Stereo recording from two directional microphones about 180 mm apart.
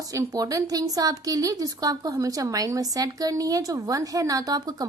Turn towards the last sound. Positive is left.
turn(degrees=-20)  # may be behind; listen again after turning